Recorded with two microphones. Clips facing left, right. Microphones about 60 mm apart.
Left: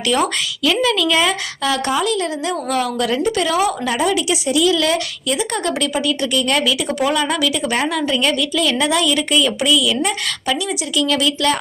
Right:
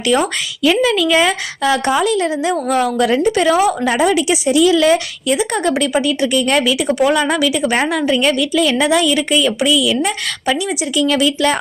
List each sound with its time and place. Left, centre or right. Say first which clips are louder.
0.1 s a woman's voice: right 2 dB; right; by 10.2 s centre
10.4 s a woman's voice: right 4 dB; right